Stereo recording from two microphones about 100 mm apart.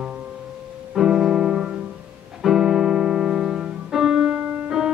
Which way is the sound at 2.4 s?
5° right (ahead or behind).